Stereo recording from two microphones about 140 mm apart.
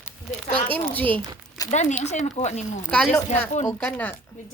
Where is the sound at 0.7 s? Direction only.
10° left (ahead or behind).